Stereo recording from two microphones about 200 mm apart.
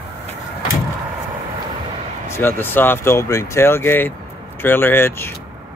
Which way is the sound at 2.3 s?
10° left (ahead or behind).